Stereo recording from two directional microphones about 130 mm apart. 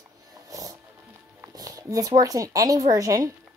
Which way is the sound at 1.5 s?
25° right (ahead or behind).